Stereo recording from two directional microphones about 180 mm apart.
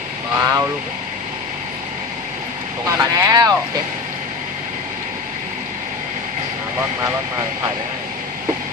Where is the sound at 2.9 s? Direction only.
20° right (ahead or behind).